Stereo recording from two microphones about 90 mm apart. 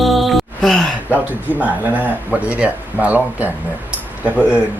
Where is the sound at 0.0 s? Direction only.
Centre (ahead or behind).